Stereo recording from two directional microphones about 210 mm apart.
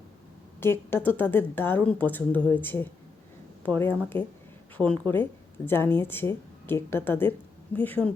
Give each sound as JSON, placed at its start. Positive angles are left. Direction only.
{"t": 0.6, "sound": "a woman's voice", "side_deg": 10}